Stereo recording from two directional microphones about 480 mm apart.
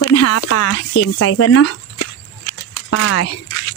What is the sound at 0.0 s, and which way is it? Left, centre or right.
Speech, left.